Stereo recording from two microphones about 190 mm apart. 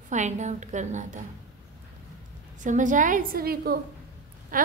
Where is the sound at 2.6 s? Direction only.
40° right (ahead or behind).